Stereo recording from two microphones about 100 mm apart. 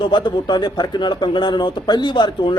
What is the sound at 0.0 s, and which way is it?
Speech, 50° left (ahead or behind).